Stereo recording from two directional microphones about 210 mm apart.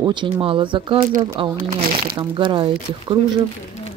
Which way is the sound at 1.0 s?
35° right (ahead or behind).